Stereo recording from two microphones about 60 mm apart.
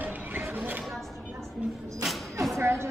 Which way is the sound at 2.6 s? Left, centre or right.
Right.